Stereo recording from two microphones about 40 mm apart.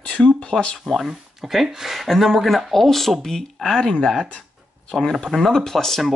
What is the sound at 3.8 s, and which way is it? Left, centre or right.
Speech, centre.